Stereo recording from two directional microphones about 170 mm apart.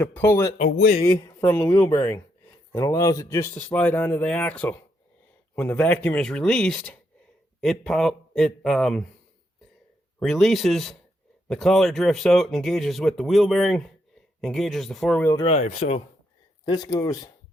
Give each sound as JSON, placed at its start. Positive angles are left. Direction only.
{"t": 0.0, "sound": "speech", "side_deg": 10}
{"t": 10.2, "sound": "speech", "side_deg": 0}
{"t": 15.4, "sound": "speech", "side_deg": 40}
{"t": 16.6, "sound": "speech", "side_deg": 25}